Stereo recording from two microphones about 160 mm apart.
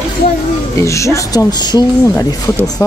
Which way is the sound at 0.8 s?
20° left (ahead or behind).